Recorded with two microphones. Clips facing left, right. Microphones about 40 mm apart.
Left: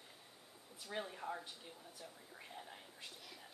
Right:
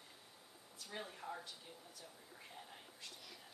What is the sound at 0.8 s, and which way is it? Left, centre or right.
Speech, centre.